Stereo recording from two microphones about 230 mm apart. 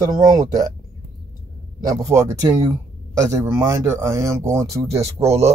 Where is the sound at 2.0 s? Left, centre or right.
Centre.